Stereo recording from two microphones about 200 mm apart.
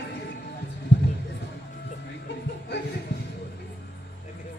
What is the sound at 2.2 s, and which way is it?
Music, 60° left (ahead or behind).